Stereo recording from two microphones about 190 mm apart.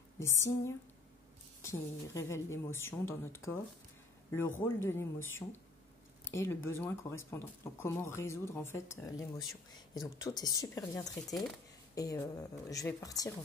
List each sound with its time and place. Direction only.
0.2 s a woman's voice: 15° left (ahead or behind)